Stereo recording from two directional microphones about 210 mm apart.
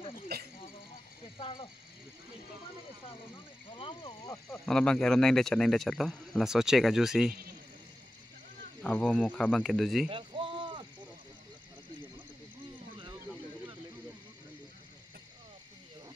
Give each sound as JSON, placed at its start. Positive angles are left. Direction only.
{"t": 0.3, "sound": "snake", "side_deg": -50}
{"t": 1.4, "sound": "speech", "side_deg": 25}
{"t": 3.7, "sound": "speech", "side_deg": 20}
{"t": 4.6, "sound": "speech", "side_deg": 5}
{"t": 8.8, "sound": "speech", "side_deg": 5}
{"t": 10.0, "sound": "a sound", "side_deg": -25}